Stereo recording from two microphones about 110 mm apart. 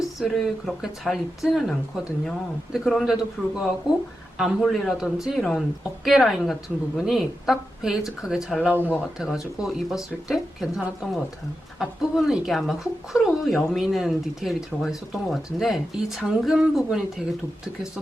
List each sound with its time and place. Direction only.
0.2 s speech: centre (ahead or behind)
2.7 s speech: centre (ahead or behind)
8.8 s speech: 15° left (ahead or behind)
9.1 s speech: 5° right (ahead or behind)